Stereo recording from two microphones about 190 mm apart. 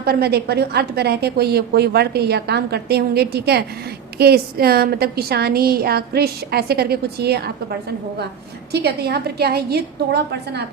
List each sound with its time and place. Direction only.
0.0 s a woman's voice: 55° right (ahead or behind)